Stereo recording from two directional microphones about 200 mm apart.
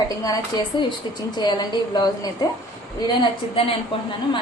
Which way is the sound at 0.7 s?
25° left (ahead or behind).